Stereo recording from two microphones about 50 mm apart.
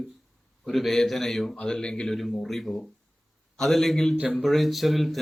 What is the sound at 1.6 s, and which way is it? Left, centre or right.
Speech, centre.